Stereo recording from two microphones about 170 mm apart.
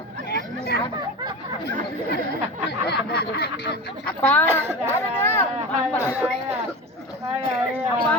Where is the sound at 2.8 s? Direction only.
70° left (ahead or behind).